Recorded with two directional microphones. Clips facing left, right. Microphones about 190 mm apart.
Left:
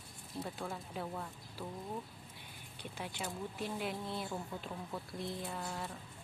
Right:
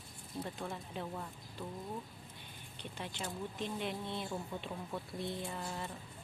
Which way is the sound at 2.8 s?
10° left (ahead or behind).